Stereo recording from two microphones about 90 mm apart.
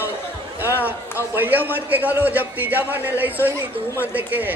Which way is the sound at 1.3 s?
20° right (ahead or behind).